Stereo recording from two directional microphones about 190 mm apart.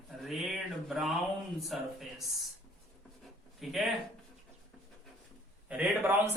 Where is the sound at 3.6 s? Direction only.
Centre (ahead or behind).